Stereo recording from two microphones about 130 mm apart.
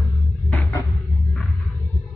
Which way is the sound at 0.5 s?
20° left (ahead or behind).